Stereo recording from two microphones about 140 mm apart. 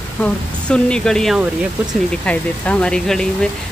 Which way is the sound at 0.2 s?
5° left (ahead or behind).